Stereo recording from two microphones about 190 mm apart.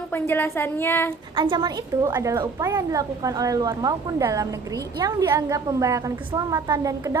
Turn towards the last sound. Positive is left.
turn(degrees=-15)  # may be behind; listen again after turning